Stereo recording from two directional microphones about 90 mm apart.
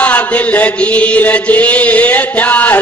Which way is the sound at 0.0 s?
15° left (ahead or behind).